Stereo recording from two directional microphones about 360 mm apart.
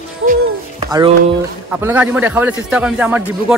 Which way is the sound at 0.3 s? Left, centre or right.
Centre.